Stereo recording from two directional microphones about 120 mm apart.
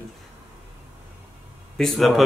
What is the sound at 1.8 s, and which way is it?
Speech, centre (ahead or behind).